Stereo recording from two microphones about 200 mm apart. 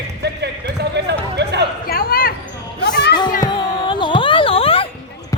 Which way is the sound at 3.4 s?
20° left (ahead or behind).